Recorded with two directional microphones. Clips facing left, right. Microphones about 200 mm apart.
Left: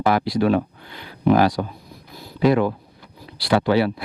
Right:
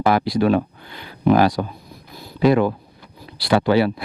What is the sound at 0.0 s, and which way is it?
Speech, 20° right (ahead or behind).